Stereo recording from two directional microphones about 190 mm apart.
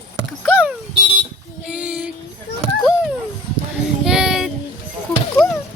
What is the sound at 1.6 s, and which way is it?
Child singing, 5° right (ahead or behind).